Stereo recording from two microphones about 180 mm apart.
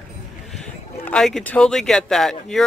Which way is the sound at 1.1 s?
5° left (ahead or behind).